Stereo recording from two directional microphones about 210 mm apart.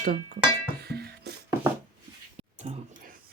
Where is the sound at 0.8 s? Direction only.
50° right (ahead or behind).